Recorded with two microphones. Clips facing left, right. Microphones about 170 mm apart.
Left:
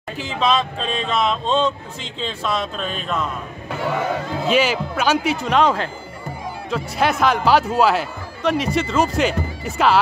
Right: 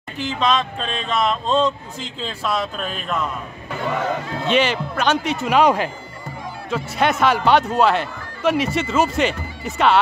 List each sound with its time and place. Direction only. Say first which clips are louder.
0.2 s speech: even; 5° left (ahead or behind)
4.4 s speech: left 1 dB; 5° left (ahead or behind)